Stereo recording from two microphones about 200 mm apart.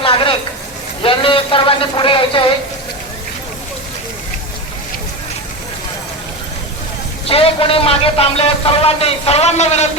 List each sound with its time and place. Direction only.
0.0 s a sound: 25° left (ahead or behind)
1.0 s a man's voice: 25° left (ahead or behind)
7.3 s a man's voice: 30° left (ahead or behind)